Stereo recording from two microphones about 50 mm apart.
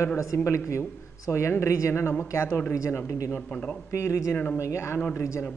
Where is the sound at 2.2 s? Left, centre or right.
Left.